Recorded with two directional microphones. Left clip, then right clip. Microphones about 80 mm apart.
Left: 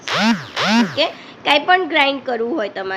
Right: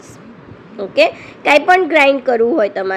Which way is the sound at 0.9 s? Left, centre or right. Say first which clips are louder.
Right 7 dB; right.